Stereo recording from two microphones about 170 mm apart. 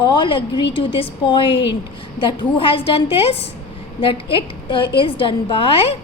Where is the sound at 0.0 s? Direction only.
30° left (ahead or behind).